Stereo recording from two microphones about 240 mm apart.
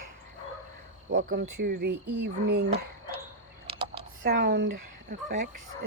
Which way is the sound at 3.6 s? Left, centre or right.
Right.